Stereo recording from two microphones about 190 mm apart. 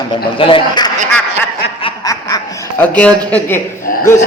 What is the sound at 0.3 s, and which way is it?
A man's voice, 30° left (ahead or behind).